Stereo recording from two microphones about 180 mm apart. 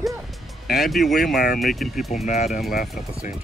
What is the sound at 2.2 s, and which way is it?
Speech, 40° left (ahead or behind).